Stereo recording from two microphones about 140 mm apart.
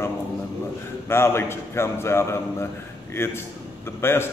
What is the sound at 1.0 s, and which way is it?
A man's voice, 15° left (ahead or behind).